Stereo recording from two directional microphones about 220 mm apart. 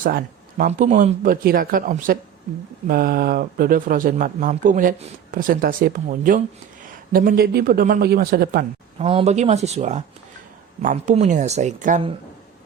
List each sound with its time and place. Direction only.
0.0 s speech: 40° right (ahead or behind)
9.0 s speech: 25° right (ahead or behind)